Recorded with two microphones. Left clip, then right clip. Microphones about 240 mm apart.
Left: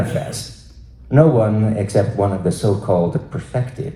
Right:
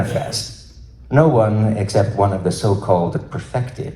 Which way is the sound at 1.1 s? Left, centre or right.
Centre.